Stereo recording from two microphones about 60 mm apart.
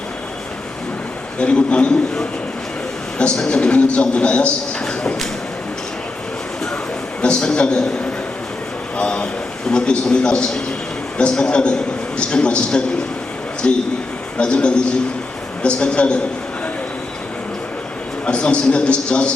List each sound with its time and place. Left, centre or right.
1.4 s a man's voice: centre
7.2 s a man's voice: centre
18.3 s a man's voice: centre